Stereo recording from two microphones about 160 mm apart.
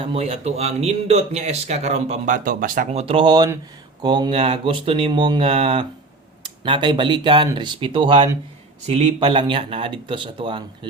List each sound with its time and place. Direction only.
0.0 s a man's voice: 40° right (ahead or behind); by 2.9 s 60° right (ahead or behind)
2.9 s speech: 40° right (ahead or behind)